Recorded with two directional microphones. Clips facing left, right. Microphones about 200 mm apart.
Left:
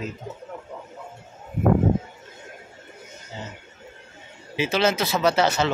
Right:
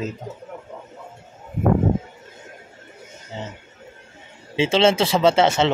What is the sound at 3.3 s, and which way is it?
Speech, 25° right (ahead or behind).